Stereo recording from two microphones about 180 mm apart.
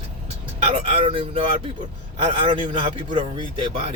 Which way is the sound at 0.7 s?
30° right (ahead or behind).